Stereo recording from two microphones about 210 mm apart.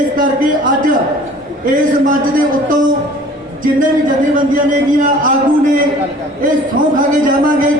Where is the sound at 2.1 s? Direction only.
40° right (ahead or behind).